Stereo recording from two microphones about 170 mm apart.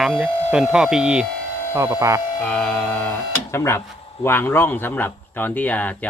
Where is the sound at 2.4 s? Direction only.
5° left (ahead or behind).